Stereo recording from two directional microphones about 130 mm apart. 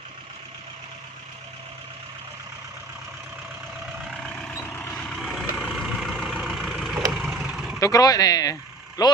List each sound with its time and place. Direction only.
4.2 s vehicle: 5° left (ahead or behind)
7.8 s speech: 25° left (ahead or behind)